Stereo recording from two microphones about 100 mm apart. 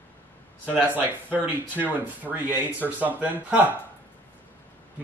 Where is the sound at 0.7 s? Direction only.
20° right (ahead or behind).